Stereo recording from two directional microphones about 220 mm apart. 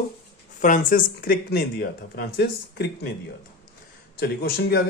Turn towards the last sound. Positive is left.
turn(degrees=45)  # may be behind; listen again after turning